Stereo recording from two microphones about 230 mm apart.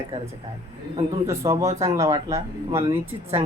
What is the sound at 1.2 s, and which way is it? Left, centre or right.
Speech, centre.